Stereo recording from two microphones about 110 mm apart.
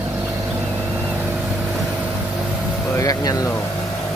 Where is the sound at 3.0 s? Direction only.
35° left (ahead or behind).